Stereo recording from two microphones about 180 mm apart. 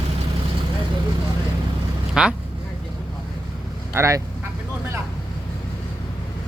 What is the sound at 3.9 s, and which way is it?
Speech, 15° right (ahead or behind).